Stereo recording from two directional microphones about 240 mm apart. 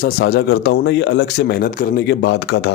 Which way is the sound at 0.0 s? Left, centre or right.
Left.